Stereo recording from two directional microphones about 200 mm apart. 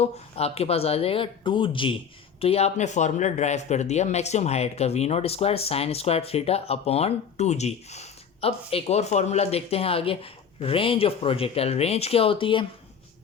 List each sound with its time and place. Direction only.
0.0 s speech: 30° left (ahead or behind)